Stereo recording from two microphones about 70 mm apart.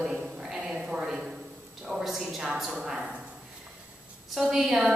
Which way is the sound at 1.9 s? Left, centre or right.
Centre.